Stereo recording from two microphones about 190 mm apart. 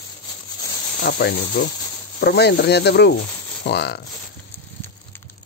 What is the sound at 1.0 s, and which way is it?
Speech, 55° left (ahead or behind).